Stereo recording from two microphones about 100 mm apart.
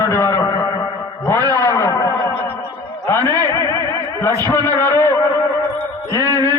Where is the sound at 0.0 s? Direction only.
30° left (ahead or behind).